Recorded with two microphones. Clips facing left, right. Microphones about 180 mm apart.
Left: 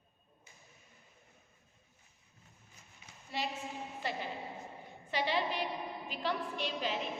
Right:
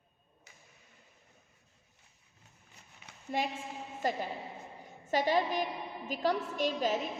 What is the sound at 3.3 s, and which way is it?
A woman's voice, 50° right (ahead or behind).